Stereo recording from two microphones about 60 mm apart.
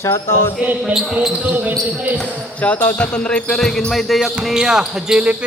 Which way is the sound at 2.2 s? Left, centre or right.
Left.